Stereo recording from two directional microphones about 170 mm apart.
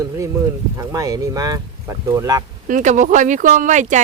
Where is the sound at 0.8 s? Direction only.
20° right (ahead or behind).